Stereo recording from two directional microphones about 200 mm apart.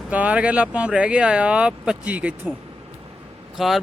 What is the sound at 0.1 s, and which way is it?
Speech, 5° right (ahead or behind).